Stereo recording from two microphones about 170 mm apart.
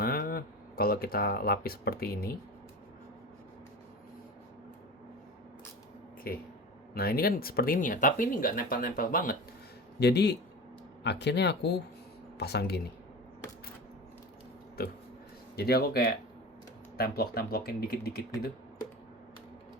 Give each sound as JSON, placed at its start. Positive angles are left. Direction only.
{"t": 0.0, "sound": "speech", "side_deg": 60}
{"t": 6.3, "sound": "speech", "side_deg": 60}
{"t": 10.0, "sound": "speech", "side_deg": 75}
{"t": 15.5, "sound": "speech", "side_deg": 65}